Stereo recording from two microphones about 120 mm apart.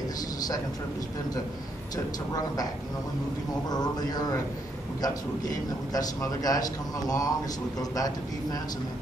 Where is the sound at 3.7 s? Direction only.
35° left (ahead or behind).